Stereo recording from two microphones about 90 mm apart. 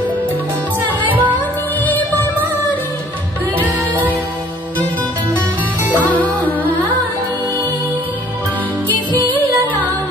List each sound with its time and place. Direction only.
1.0 s music: 20° right (ahead or behind)